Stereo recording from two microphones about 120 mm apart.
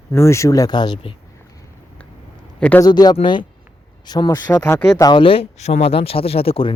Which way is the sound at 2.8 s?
35° left (ahead or behind).